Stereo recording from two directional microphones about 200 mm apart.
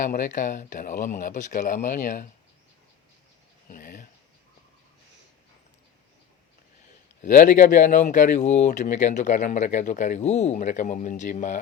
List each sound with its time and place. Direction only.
0.0 s speech: 45° left (ahead or behind)
3.7 s a sound: 45° left (ahead or behind)
7.2 s speech: 40° left (ahead or behind)